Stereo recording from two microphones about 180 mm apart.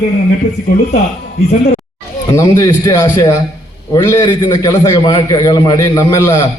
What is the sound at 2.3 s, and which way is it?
A man's voice, 20° left (ahead or behind).